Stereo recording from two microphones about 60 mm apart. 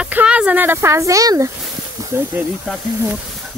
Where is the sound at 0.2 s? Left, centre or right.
Centre.